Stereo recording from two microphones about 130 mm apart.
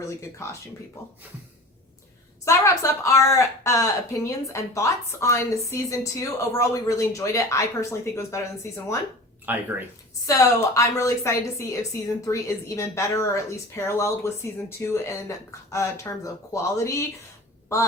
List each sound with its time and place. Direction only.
2.4 s a woman's voice: 20° left (ahead or behind)
9.5 s speech: 15° right (ahead or behind)
10.2 s a woman's voice: 25° left (ahead or behind)